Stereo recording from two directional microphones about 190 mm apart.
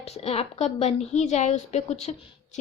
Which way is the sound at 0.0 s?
35° left (ahead or behind).